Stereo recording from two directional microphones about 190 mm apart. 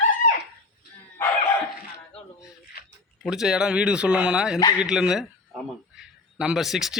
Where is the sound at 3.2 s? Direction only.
5° right (ahead or behind).